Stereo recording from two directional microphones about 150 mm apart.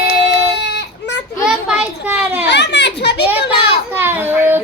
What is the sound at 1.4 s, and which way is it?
Children playing, 5° right (ahead or behind).